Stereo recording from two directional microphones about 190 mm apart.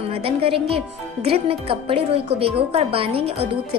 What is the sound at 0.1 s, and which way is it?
A woman's voice, 30° right (ahead or behind).